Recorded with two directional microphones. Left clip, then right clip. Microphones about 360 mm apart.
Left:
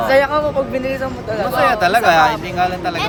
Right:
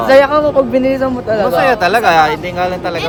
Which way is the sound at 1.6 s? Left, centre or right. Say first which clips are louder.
Even; centre.